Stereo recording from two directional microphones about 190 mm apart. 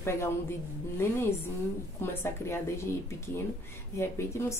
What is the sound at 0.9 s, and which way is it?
Speech, 10° left (ahead or behind).